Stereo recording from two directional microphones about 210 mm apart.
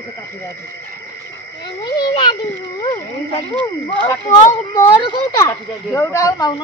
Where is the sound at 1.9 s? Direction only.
20° left (ahead or behind).